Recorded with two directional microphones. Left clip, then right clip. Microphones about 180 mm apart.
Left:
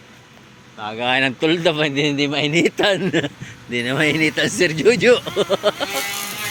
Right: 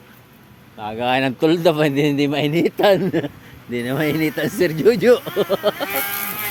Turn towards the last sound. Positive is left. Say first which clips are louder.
# even
turn(degrees=-20)  # may be behind; listen again after turning